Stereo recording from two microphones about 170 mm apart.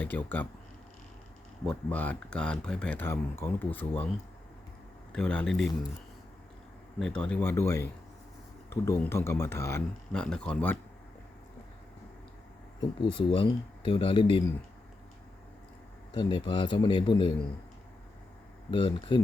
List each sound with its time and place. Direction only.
0.0 s speech: 10° left (ahead or behind)
1.6 s speech: 10° left (ahead or behind)
5.1 s speech: 5° left (ahead or behind)
7.0 s speech: 5° left (ahead or behind)
10.1 s speech: 5° left (ahead or behind)
13.1 s speech: 30° left (ahead or behind)
16.1 s speech: 25° left (ahead or behind)
18.7 s speech: 30° left (ahead or behind)